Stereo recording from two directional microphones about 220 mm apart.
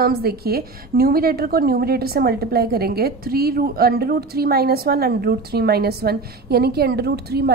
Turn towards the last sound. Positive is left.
turn(degrees=-45)  # may be behind; listen again after turning